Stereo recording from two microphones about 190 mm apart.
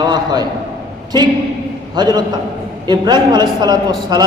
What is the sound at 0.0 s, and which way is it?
Speech, 20° right (ahead or behind).